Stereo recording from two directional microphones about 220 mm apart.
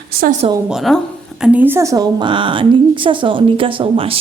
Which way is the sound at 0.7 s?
Centre (ahead or behind).